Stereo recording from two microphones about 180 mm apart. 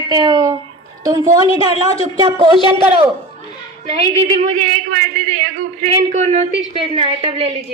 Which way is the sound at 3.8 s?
35° right (ahead or behind).